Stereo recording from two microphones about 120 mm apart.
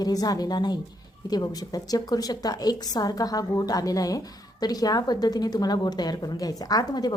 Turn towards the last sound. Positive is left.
turn(degrees=30)  # may be behind; listen again after turning